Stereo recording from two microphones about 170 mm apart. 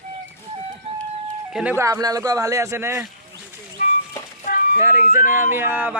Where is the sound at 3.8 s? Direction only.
50° left (ahead or behind).